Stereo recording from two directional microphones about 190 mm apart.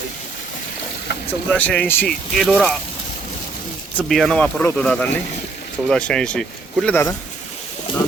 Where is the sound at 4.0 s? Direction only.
Centre (ahead or behind).